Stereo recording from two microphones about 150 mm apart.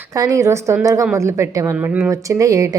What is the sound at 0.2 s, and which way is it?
A woman's voice, 20° right (ahead or behind).